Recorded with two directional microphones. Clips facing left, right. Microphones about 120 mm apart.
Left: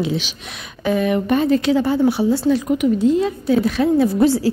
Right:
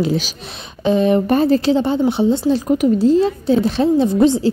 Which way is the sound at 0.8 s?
30° right (ahead or behind).